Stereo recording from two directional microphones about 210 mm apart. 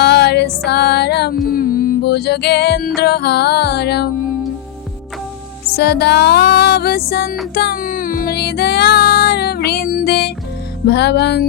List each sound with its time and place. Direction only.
0.0 s music: 50° left (ahead or behind)
5.7 s music: 50° left (ahead or behind)